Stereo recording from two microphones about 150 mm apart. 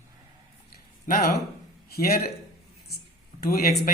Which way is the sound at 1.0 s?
65° left (ahead or behind).